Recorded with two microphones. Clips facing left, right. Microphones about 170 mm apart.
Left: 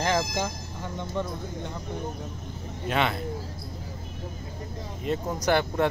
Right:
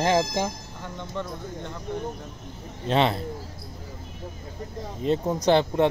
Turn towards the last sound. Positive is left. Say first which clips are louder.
# right 4 dB
turn(degrees=-20)  # may be behind; listen again after turning